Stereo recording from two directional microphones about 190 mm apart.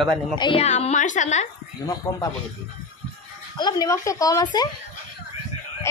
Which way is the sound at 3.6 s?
20° left (ahead or behind).